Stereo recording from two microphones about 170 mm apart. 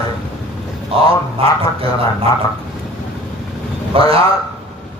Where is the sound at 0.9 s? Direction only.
35° right (ahead or behind).